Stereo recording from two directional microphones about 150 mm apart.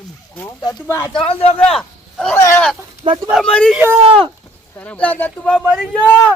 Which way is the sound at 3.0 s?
35° right (ahead or behind).